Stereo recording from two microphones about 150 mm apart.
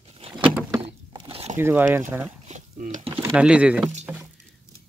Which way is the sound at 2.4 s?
50° right (ahead or behind).